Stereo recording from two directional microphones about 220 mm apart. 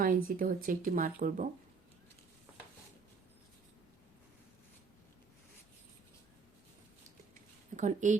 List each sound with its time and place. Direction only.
0.0 s speech: 40° right (ahead or behind)
7.8 s speech: 35° right (ahead or behind)